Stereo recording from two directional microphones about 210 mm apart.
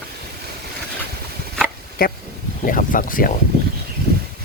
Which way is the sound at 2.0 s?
45° left (ahead or behind).